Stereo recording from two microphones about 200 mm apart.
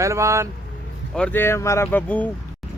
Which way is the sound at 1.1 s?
10° left (ahead or behind).